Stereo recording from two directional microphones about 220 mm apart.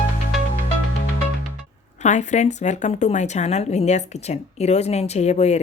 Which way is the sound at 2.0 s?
35° left (ahead or behind).